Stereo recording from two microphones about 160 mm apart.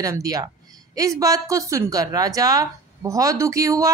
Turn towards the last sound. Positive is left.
turn(degrees=-20)  # may be behind; listen again after turning